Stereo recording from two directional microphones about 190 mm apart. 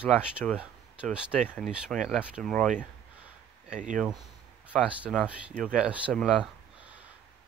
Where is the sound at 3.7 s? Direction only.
40° right (ahead or behind).